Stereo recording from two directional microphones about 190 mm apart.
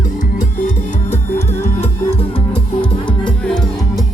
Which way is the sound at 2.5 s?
25° left (ahead or behind).